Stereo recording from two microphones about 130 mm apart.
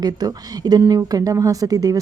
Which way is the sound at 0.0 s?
30° right (ahead or behind).